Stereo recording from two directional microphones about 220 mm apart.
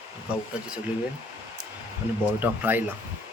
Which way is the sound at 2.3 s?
10° right (ahead or behind).